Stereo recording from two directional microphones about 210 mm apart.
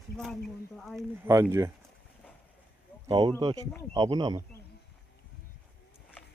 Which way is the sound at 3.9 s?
20° right (ahead or behind).